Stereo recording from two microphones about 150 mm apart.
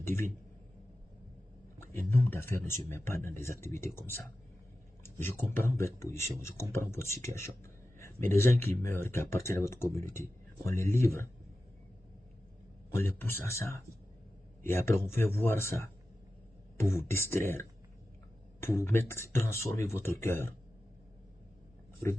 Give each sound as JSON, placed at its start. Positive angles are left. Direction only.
{"t": 0.0, "sound": "speech", "side_deg": 15}
{"t": 2.0, "sound": "speech", "side_deg": 15}
{"t": 5.0, "sound": "a sound", "side_deg": 15}
{"t": 5.5, "sound": "speech", "side_deg": 20}
{"t": 12.9, "sound": "speech", "side_deg": 15}
{"t": 17.0, "sound": "speech", "side_deg": 15}